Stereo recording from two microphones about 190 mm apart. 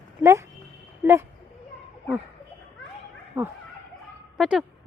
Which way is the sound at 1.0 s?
10° right (ahead or behind).